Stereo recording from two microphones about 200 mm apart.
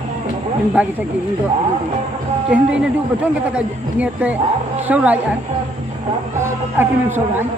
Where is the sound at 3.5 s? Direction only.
5° right (ahead or behind).